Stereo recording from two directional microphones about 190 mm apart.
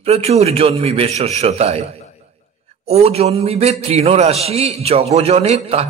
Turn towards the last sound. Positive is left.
turn(degrees=-35)  # may be behind; listen again after turning